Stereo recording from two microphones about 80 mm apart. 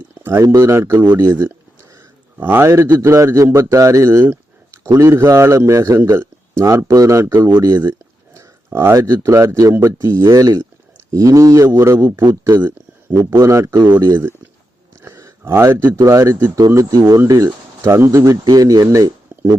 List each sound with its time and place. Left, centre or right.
0.1 s a sound: right
0.5 s a man's voice: right
4.2 s a sound: right
4.9 s a man's voice: right
7.3 s speech: right
9.7 s a man's voice: right
12.2 s speech: right
12.5 s speech: right
15.0 s a sound: right
16.0 s speech: right